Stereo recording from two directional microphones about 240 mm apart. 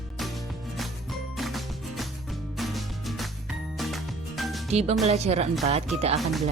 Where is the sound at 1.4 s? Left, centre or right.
Centre.